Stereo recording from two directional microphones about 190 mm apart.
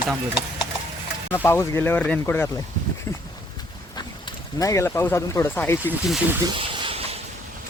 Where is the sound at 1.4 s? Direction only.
10° left (ahead or behind).